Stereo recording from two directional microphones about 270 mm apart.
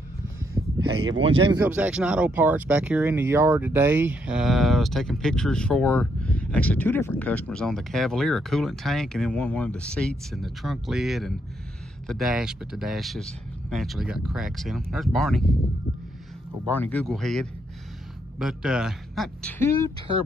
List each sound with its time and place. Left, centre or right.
0.4 s a sound: centre
1.2 s speech: centre
1.6 s speech: centre
16.6 s speech: centre